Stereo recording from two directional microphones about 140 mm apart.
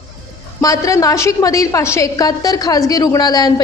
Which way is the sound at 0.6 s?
25° left (ahead or behind).